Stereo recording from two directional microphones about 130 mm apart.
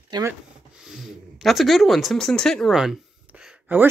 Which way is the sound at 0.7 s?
5° right (ahead or behind).